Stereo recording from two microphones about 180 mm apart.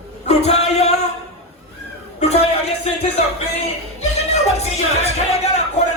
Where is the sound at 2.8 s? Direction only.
35° left (ahead or behind).